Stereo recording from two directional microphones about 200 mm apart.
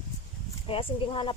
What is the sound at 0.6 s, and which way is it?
Speech, 25° left (ahead or behind).